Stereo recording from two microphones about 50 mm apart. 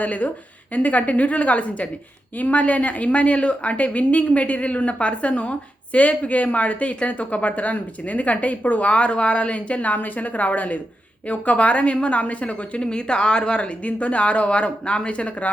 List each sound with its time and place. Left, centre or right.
0.0 s a woman's voice: left